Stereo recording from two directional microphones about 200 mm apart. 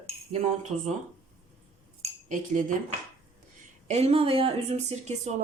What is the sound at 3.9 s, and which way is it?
Speech, 30° right (ahead or behind).